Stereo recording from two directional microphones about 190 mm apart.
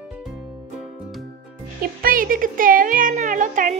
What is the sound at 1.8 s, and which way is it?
Speech, 50° right (ahead or behind).